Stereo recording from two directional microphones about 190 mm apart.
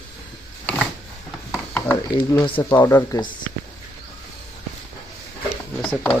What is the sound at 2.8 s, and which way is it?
Speech, 15° left (ahead or behind).